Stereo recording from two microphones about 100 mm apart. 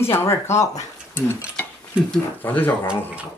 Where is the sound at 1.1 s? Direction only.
25° left (ahead or behind).